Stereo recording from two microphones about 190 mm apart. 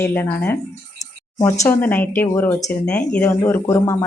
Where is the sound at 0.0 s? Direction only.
10° left (ahead or behind).